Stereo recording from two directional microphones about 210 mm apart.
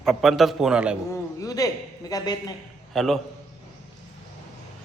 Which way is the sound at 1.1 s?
15° left (ahead or behind).